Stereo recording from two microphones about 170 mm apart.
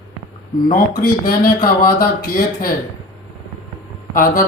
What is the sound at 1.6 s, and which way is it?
Speech, 60° left (ahead or behind).